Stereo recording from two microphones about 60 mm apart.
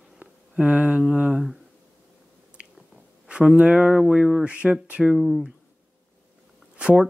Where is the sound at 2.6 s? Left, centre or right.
Right.